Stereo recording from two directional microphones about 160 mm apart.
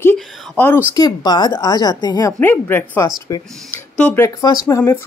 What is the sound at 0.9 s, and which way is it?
Speech, 25° left (ahead or behind).